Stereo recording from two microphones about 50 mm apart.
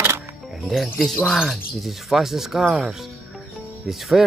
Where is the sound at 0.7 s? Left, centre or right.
Centre.